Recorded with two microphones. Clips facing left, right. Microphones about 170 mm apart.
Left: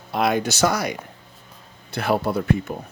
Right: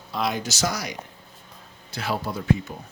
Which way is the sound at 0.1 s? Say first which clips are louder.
Left 6 dB; 60° left (ahead or behind).